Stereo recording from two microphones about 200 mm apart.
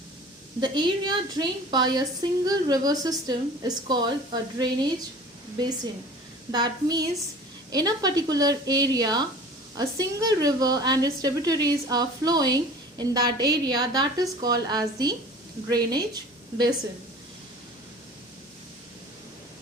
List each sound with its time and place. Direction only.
0.6 s a woman's voice: 20° right (ahead or behind)
6.5 s a woman's voice: 20° right (ahead or behind)